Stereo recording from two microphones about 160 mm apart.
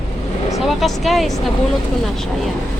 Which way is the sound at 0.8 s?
Centre (ahead or behind).